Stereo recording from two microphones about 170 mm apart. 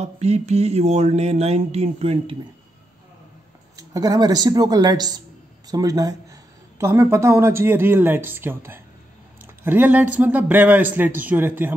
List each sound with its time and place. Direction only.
0.0 s speech: 40° right (ahead or behind)
3.7 s a man's voice: 20° right (ahead or behind)